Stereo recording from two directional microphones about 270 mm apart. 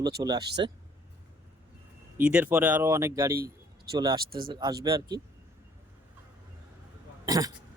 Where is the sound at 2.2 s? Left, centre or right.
Centre.